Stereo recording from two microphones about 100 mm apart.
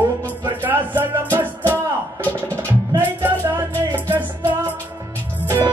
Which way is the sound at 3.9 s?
20° right (ahead or behind).